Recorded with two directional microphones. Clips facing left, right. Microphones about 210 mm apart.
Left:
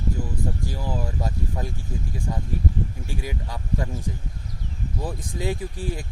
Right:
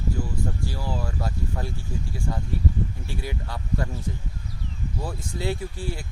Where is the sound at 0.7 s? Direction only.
15° left (ahead or behind).